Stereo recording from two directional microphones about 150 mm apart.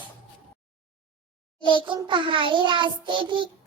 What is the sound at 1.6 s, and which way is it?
Speech, 35° left (ahead or behind).